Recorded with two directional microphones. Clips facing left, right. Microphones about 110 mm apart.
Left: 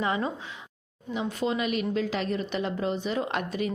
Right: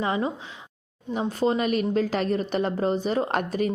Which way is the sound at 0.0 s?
25° right (ahead or behind).